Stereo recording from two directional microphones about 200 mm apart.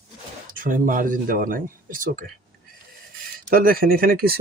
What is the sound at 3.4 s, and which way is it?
Speech, 45° right (ahead or behind).